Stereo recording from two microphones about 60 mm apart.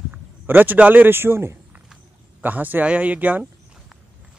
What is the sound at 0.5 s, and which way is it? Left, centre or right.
Speech, right.